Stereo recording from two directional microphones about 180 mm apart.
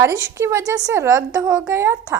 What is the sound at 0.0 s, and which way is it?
A woman's voice, 15° right (ahead or behind).